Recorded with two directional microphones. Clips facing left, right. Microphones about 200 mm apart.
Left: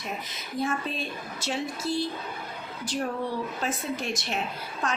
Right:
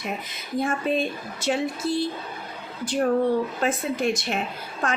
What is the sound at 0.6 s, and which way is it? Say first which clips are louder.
Speech: right 6 dB; 55° right (ahead or behind).